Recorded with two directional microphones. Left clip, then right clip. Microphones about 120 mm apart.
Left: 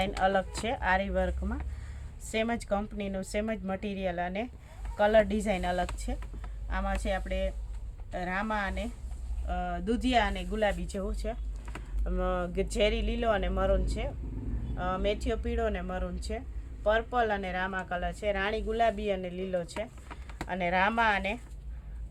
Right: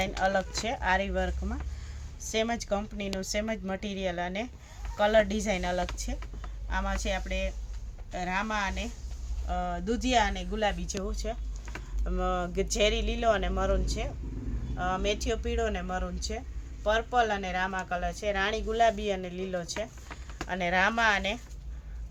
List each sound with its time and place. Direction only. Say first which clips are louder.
0.0 s speech: even; 35° left (ahead or behind)
3.2 s speech: right 1 dB; 10° left (ahead or behind)
9.5 s speech: right 1 dB; 25° left (ahead or behind); by 21.4 s 5° left (ahead or behind)